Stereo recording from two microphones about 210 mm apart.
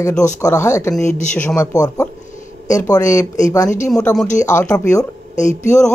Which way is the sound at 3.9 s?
5° left (ahead or behind).